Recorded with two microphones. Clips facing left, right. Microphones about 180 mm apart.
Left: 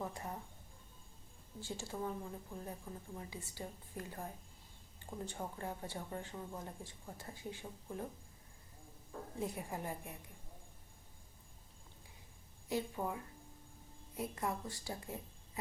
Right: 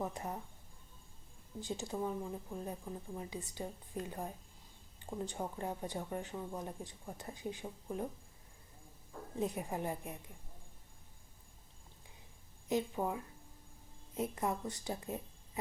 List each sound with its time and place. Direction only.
0.0 s speech: 20° right (ahead or behind)
1.6 s speech: 20° right (ahead or behind)
9.4 s speech: 20° right (ahead or behind)
12.6 s speech: 20° right (ahead or behind)
14.2 s speech: 20° right (ahead or behind)